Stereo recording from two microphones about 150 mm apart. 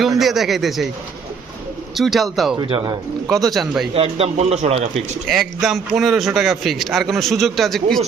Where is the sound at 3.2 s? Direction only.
Centre (ahead or behind).